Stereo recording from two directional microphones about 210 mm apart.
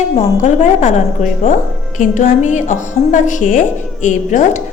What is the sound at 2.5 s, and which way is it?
A woman's voice, 35° left (ahead or behind).